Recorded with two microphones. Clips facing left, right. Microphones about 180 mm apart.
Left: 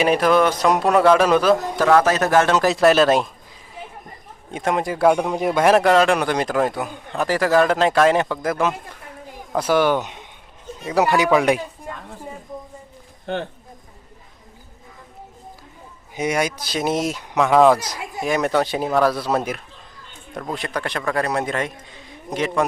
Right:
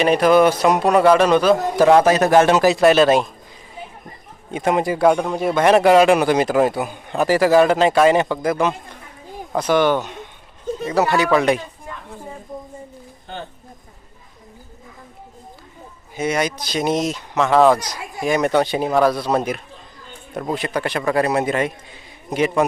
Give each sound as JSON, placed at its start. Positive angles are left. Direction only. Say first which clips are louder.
{"t": 0.0, "sound": "a man's voice", "louder": "right 3 dB", "side_deg": 0}
{"t": 1.8, "sound": "speech", "louder": "right 5 dB", "side_deg": -20}
{"t": 2.6, "sound": "a man's voice", "louder": "right 2 dB", "side_deg": 0}
{"t": 4.5, "sound": "a man's voice", "louder": "right 3 dB", "side_deg": -5}
{"t": 5.6, "sound": "a man's voice", "louder": "right 3 dB", "side_deg": 0}
{"t": 13.2, "sound": "speech", "louder": "left 7 dB", "side_deg": 70}
{"t": 16.1, "sound": "a man's voice", "louder": "right 1 dB", "side_deg": 10}